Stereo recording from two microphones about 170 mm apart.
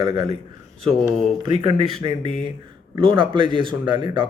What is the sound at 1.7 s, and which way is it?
Speech, 30° right (ahead or behind).